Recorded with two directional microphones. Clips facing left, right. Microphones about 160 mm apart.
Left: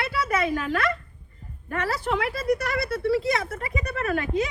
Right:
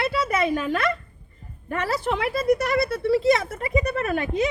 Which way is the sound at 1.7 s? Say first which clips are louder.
Right 2 dB; 25° right (ahead or behind).